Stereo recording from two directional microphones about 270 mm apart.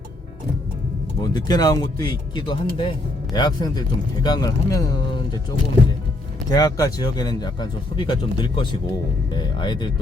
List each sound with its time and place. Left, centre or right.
1.2 s speech: centre
6.5 s speech: centre